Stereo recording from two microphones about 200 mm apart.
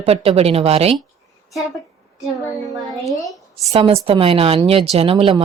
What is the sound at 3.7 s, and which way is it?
Speech, 25° right (ahead or behind).